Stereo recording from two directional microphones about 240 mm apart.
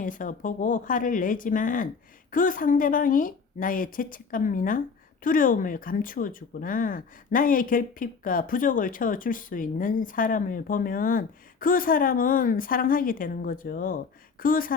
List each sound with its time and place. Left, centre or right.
0.0 s speech: left